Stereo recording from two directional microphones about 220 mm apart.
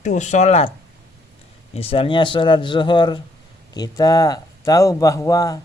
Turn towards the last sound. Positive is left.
turn(degrees=15)  # may be behind; listen again after turning